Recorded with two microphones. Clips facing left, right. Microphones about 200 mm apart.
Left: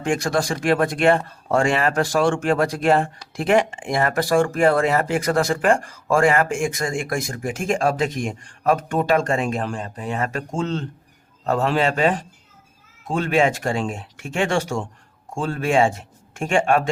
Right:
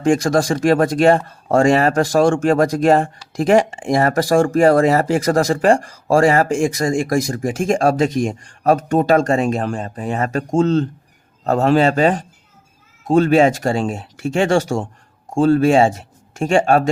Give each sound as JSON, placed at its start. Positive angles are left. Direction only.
{"t": 0.0, "sound": "speech", "side_deg": -40}